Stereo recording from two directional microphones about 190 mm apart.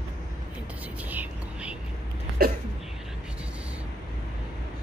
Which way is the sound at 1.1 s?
10° right (ahead or behind).